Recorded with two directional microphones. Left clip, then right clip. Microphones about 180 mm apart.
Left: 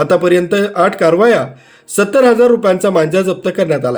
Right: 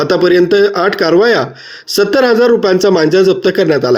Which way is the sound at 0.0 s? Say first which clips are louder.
Right 1 dB; 25° right (ahead or behind).